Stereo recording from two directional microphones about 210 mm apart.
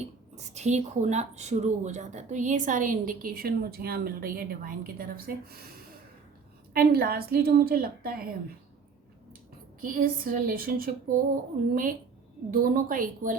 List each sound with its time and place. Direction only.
0.0 s a woman's voice: 30° right (ahead or behind)
6.7 s a woman's voice: 45° right (ahead or behind)
9.8 s a woman's voice: 40° right (ahead or behind)